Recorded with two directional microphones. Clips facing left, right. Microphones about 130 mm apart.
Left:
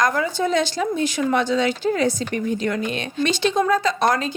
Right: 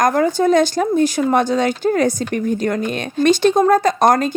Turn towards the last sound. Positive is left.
turn(degrees=-45)  # may be behind; listen again after turning